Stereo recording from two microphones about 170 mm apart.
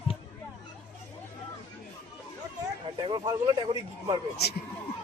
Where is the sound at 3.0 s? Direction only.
25° right (ahead or behind).